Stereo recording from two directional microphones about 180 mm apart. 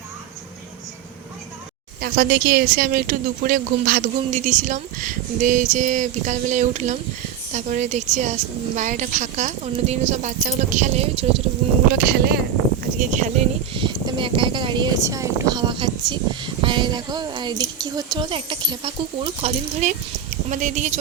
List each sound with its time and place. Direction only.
2.0 s a woman's voice: 55° right (ahead or behind); by 11.4 s 35° right (ahead or behind)
12.0 s speech: 65° right (ahead or behind)
13.0 s speech: 45° right (ahead or behind)
13.7 s a woman's voice: 30° right (ahead or behind)